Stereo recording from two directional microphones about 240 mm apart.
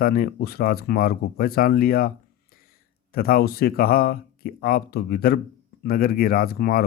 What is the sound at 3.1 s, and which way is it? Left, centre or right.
Speech, left.